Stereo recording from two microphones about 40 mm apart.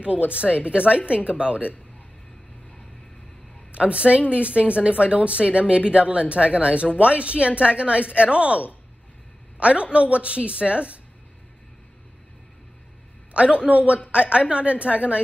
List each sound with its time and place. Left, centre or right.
0.0 s a woman's voice: right
3.7 s a woman's voice: right
13.3 s a woman's voice: right